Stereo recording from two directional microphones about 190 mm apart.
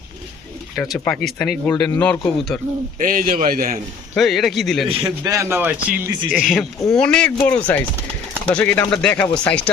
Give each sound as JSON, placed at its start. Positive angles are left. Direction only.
{"t": 0.8, "sound": "speech", "side_deg": 5}
{"t": 3.0, "sound": "a man's voice", "side_deg": -45}
{"t": 4.1, "sound": "speech", "side_deg": 0}
{"t": 5.2, "sound": "speech", "side_deg": -15}